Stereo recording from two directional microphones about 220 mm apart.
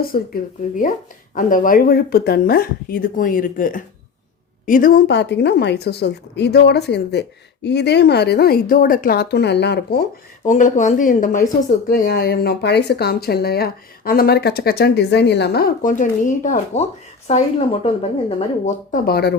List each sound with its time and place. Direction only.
0.1 s speech: 40° left (ahead or behind)
1.4 s a woman's voice: 35° left (ahead or behind)
10.4 s a woman's voice: 35° left (ahead or behind)
19.0 s a woman's voice: 45° left (ahead or behind)